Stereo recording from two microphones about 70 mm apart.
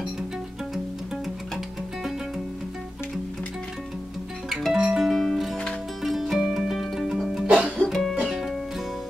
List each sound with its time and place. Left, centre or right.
4.5 s music: centre
7.6 s music: centre
7.9 s music: centre